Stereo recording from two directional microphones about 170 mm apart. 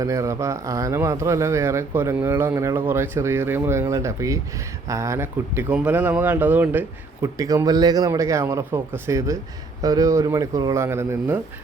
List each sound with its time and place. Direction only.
0.0 s speech: 20° right (ahead or behind)